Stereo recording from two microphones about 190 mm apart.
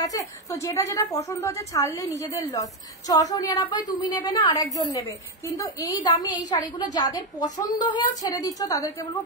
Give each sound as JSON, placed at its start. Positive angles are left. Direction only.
{"t": 0.0, "sound": "a woman's voice", "side_deg": 20}